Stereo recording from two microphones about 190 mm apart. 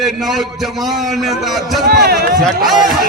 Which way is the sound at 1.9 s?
55° right (ahead or behind).